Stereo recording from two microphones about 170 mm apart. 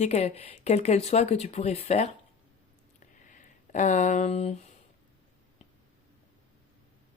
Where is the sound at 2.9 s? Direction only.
50° left (ahead or behind).